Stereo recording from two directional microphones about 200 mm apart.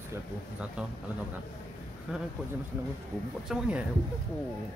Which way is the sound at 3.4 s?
5° right (ahead or behind).